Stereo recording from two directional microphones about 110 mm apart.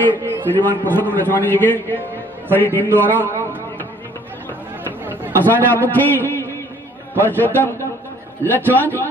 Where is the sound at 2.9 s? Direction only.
20° right (ahead or behind).